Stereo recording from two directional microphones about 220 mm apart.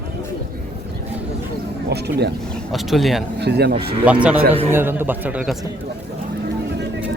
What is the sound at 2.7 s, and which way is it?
Speech, centre (ahead or behind).